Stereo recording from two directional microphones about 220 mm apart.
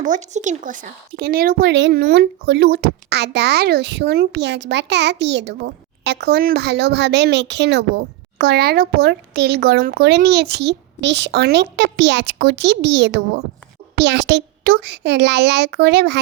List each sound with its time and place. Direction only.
0.0 s speech: 35° right (ahead or behind); by 16.1 s 50° right (ahead or behind)